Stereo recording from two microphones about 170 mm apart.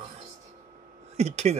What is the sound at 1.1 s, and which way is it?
Speech, 40° right (ahead or behind).